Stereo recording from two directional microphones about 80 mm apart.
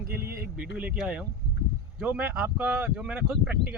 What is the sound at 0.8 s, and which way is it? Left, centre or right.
Speech, centre.